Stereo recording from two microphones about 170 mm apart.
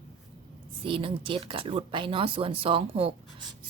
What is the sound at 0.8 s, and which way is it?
Speech, 30° right (ahead or behind).